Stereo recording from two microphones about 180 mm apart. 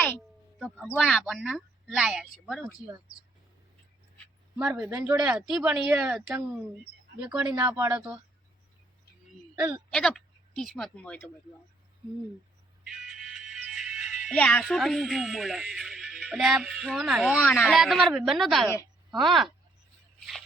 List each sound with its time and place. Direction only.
0.9 s speech: centre (ahead or behind)
4.5 s speech: 10° right (ahead or behind)
7.4 s speech: 20° right (ahead or behind)
9.6 s speech: 10° right (ahead or behind)
9.9 s speech: 5° left (ahead or behind)
12.8 s music: 5° right (ahead or behind)
14.3 s speech: 5° left (ahead or behind)